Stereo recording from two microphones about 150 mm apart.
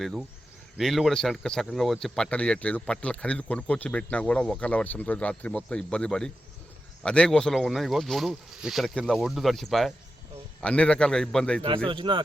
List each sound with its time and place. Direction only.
0.8 s speech: centre (ahead or behind)
11.9 s speech: 30° right (ahead or behind)